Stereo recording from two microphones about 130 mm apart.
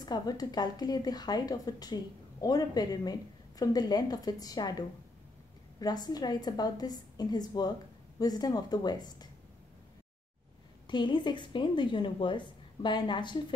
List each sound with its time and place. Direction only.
0.0 s a woman's voice: 30° left (ahead or behind)
10.9 s a woman's voice: 35° left (ahead or behind)